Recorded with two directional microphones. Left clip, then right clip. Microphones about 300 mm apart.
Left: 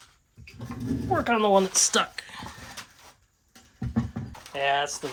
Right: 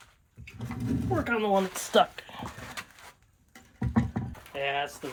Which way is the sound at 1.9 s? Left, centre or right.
Centre.